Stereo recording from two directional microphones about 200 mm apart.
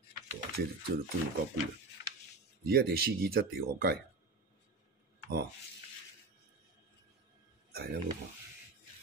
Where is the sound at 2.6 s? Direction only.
50° right (ahead or behind).